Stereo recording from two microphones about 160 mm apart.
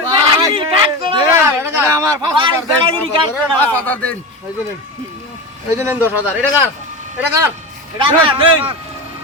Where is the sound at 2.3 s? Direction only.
30° right (ahead or behind).